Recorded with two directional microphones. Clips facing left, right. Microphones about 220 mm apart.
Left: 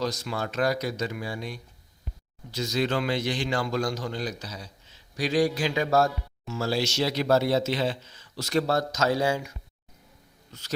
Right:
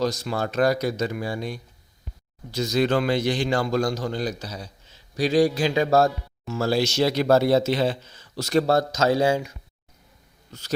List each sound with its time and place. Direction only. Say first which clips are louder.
0.0 s speech: right 5 dB; 40° right (ahead or behind)
6.5 s speech: right 5 dB; 50° right (ahead or behind); by 9.5 s 30° right (ahead or behind)
10.5 s speech: right 5 dB; 40° right (ahead or behind)